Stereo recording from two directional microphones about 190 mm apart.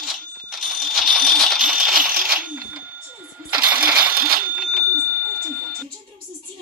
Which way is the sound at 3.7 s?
50° right (ahead or behind).